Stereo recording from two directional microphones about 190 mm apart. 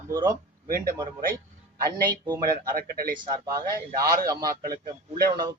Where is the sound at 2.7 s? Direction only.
50° right (ahead or behind).